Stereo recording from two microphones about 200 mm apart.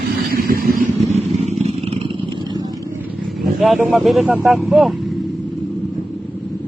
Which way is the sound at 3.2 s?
Centre (ahead or behind).